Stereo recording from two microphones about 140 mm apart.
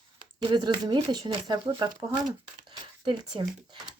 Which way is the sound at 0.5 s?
35° right (ahead or behind).